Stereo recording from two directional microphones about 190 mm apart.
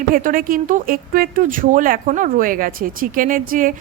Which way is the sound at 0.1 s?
45° right (ahead or behind).